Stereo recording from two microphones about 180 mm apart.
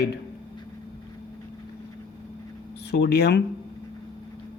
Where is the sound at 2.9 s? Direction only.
65° left (ahead or behind).